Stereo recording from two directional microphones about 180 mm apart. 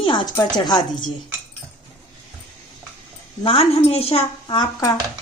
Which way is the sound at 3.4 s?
30° left (ahead or behind).